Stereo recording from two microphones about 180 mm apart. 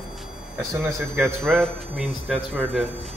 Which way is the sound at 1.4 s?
Centre (ahead or behind).